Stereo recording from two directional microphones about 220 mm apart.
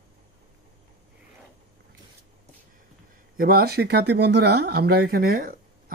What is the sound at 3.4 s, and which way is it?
Speech, 45° right (ahead or behind).